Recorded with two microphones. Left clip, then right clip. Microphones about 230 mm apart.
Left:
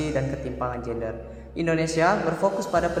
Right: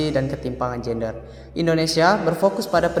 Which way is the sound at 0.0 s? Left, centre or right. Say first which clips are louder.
Right 5 dB; right.